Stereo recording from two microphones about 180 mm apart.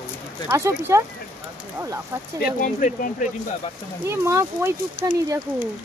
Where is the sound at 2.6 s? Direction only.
50° left (ahead or behind).